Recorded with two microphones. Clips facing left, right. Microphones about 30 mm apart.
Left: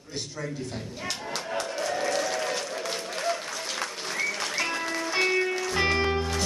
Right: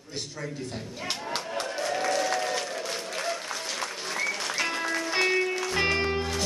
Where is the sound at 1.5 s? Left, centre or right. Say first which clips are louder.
Left 1 dB; centre.